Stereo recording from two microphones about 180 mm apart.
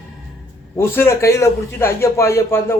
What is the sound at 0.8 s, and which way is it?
Speech, 15° left (ahead or behind).